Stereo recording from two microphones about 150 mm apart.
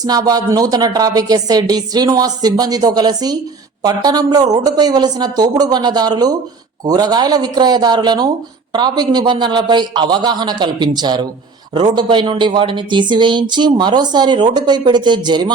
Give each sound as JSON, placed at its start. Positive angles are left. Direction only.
{"t": 0.0, "sound": "speech", "side_deg": -25}